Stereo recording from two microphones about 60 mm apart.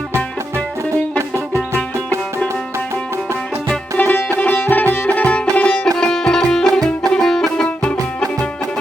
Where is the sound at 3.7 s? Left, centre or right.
Left; by 7.5 s centre.